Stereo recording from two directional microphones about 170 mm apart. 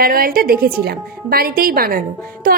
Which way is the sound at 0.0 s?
60° right (ahead or behind).